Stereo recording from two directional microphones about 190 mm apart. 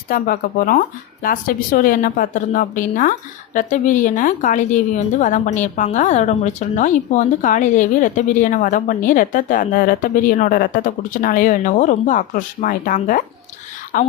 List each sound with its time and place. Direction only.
0.1 s a woman's voice: 50° left (ahead or behind)